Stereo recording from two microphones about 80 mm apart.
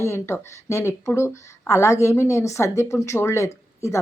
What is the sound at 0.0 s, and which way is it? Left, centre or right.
Speech, left.